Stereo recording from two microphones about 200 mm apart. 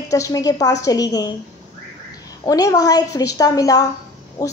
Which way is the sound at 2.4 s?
20° left (ahead or behind).